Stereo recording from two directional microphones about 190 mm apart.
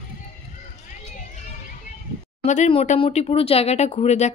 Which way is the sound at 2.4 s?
40° left (ahead or behind).